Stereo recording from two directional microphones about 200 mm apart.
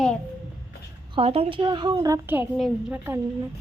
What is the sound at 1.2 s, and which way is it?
A woman's voice, 30° right (ahead or behind).